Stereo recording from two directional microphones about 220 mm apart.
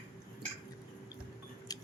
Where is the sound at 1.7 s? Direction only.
15° left (ahead or behind).